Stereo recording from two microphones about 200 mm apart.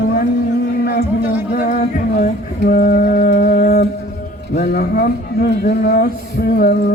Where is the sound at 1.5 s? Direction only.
45° left (ahead or behind).